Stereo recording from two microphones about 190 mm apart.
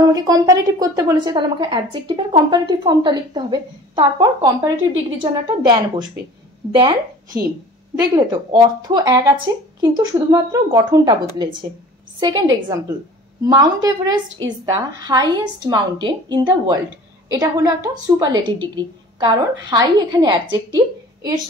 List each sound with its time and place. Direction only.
0.0 s a woman's voice: 20° right (ahead or behind)